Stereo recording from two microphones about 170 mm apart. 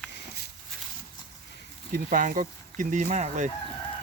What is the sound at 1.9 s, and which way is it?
Speech, 55° right (ahead or behind).